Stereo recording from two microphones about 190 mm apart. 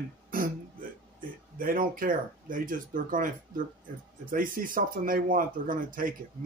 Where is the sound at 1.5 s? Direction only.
50° right (ahead or behind).